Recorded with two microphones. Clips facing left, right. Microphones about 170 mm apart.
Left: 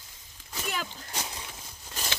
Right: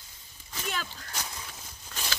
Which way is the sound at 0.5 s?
10° left (ahead or behind).